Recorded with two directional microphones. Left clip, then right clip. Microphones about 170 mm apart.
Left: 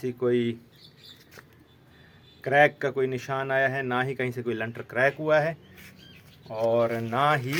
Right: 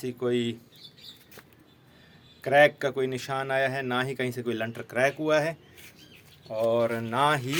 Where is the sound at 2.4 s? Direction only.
10° right (ahead or behind).